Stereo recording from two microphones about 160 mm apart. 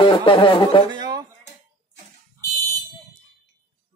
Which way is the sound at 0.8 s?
25° right (ahead or behind).